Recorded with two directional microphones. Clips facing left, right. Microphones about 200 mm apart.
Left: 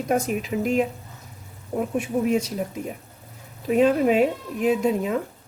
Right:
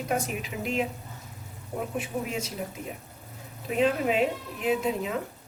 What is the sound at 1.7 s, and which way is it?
Speech, 40° left (ahead or behind).